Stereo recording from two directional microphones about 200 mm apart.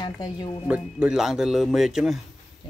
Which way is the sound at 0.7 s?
5° right (ahead or behind).